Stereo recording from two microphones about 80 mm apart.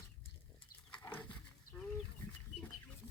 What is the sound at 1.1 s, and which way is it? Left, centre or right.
Dog, centre.